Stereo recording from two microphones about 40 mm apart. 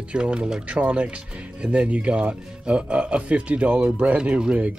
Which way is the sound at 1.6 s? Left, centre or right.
Right.